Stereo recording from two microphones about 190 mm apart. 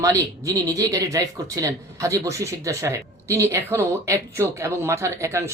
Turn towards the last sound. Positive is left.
turn(degrees=-15)  # may be behind; listen again after turning